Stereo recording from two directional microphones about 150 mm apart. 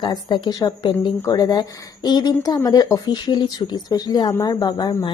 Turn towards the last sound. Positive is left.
turn(degrees=30)  # may be behind; listen again after turning